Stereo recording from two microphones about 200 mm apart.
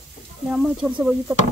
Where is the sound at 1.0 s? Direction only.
10° right (ahead or behind).